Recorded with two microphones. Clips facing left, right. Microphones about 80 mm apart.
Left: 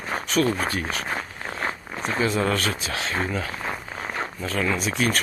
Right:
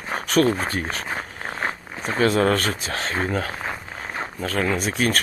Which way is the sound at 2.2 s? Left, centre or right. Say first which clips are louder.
Right 5 dB; right.